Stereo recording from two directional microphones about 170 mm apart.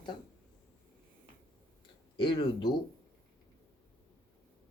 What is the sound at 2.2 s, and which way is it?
Speech, 30° left (ahead or behind).